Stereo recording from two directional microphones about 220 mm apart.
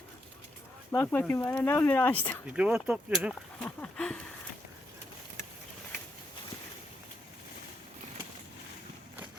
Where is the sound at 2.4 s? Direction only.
5° right (ahead or behind).